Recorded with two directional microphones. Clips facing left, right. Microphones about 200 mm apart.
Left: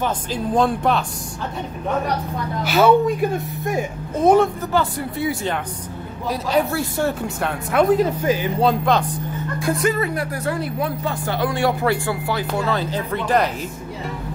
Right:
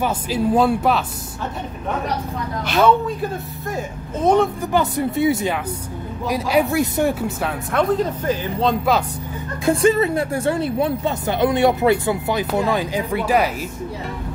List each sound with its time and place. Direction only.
0.0 s speech: 5° right (ahead or behind)
2.6 s speech: 5° left (ahead or behind)
4.6 s speech: 20° right (ahead or behind)
7.2 s speech: centre (ahead or behind)
7.9 s speech: 10° left (ahead or behind)
8.8 s speech: 5° right (ahead or behind)
9.6 s speech: 25° right (ahead or behind); by 13.5 s 10° right (ahead or behind)